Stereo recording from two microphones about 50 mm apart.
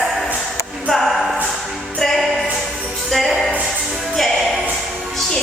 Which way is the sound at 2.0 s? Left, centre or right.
Centre.